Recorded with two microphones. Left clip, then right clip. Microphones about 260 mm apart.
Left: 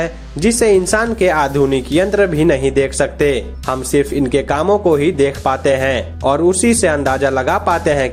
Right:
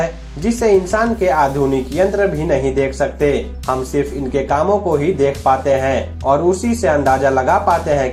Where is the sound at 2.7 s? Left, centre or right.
Left.